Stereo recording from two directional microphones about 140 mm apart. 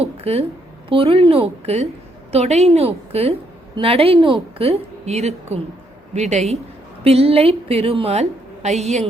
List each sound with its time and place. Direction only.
0.0 s a woman's voice: 45° right (ahead or behind)